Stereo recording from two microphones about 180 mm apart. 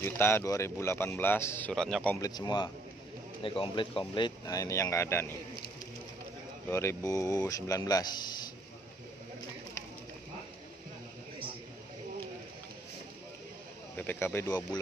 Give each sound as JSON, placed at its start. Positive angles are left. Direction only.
{"t": 0.0, "sound": "speech", "side_deg": 15}
{"t": 2.2, "sound": "speech", "side_deg": 20}
{"t": 6.7, "sound": "speech", "side_deg": 15}
{"t": 13.9, "sound": "speech", "side_deg": 10}